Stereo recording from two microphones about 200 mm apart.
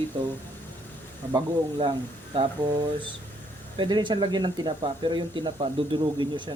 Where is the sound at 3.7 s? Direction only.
25° right (ahead or behind).